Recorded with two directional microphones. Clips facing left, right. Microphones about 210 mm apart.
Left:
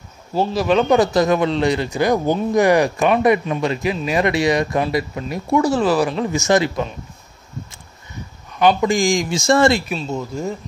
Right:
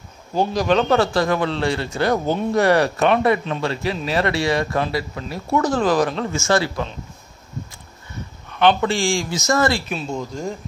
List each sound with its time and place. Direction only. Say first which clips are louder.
0.3 s speech: left 1 dB; 5° left (ahead or behind)
8.5 s speech: left 2 dB; 10° left (ahead or behind)
9.9 s speech: left 2 dB; 5° left (ahead or behind)